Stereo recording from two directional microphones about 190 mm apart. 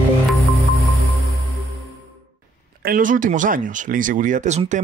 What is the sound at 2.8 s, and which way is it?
Speech, 45° right (ahead or behind).